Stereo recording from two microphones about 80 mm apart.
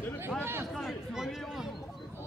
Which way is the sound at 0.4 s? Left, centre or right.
Right.